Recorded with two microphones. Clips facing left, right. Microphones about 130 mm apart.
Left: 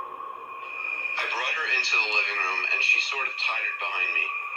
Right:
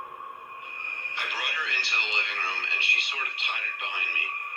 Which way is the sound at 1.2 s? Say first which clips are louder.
Left 3 dB; 35° left (ahead or behind).